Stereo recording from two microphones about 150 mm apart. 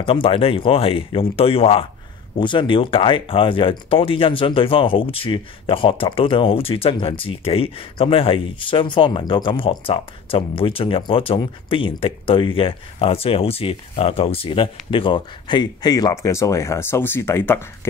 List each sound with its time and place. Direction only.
0.0 s speech: 40° left (ahead or behind); by 17.6 s 15° left (ahead or behind)